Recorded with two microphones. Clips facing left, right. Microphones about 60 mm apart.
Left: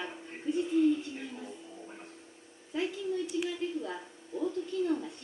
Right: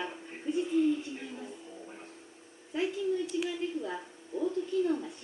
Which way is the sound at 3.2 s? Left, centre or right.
Centre.